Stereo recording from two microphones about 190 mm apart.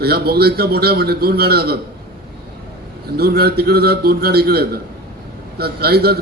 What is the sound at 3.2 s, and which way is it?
A man's voice, 55° right (ahead or behind).